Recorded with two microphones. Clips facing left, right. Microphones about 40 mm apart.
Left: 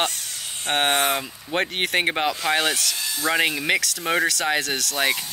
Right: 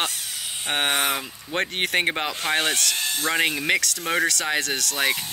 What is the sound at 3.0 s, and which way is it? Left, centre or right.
Speech, right.